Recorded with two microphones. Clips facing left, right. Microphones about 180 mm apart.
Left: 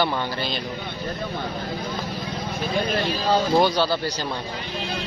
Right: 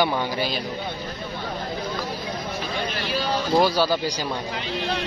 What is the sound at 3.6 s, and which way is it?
Speech, 5° right (ahead or behind).